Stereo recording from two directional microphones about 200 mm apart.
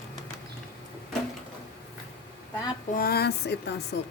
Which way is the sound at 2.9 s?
50° left (ahead or behind).